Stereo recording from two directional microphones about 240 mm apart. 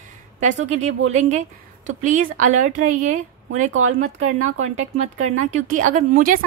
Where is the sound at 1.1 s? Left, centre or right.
Right.